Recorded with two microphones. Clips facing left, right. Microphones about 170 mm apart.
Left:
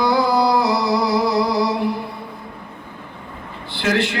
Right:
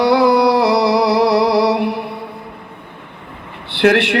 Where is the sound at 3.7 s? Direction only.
70° right (ahead or behind).